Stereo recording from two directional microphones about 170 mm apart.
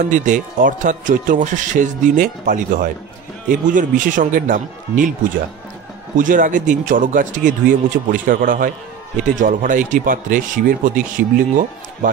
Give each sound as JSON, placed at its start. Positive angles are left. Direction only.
{"t": 0.1, "sound": "speech", "side_deg": -50}
{"t": 6.1, "sound": "speech", "side_deg": -50}